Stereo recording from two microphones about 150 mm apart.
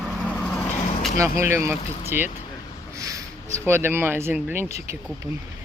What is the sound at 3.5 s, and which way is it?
Speech, 15° right (ahead or behind).